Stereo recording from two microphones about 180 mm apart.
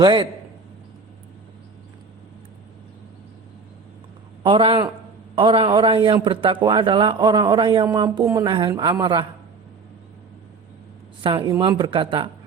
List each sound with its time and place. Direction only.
0.0 s a man's voice: 25° right (ahead or behind)
4.4 s a man's voice: 30° right (ahead or behind)
11.2 s a man's voice: 25° right (ahead or behind)